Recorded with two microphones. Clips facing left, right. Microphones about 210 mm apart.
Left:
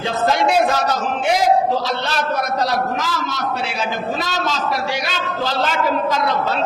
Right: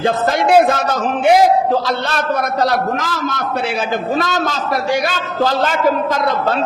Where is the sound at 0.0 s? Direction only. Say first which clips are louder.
Right 2 dB; 50° right (ahead or behind).